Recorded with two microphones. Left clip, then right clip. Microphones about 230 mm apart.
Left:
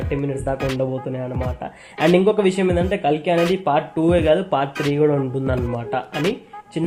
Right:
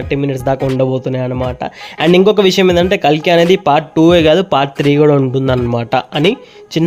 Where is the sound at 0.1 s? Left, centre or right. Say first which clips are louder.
Right 9 dB; right.